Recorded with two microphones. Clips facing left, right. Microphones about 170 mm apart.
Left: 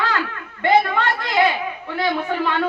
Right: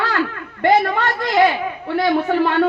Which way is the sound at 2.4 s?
45° right (ahead or behind).